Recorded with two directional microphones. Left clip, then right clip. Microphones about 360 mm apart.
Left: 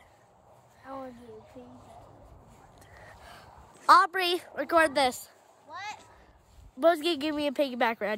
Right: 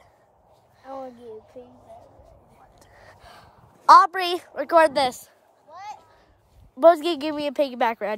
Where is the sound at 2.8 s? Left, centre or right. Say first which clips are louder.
Right 1 dB; centre.